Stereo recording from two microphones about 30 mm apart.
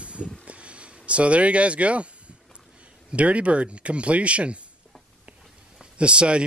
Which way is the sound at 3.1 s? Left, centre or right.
Right.